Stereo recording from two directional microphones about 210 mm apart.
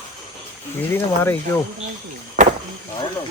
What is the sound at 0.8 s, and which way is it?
Speech, 10° left (ahead or behind).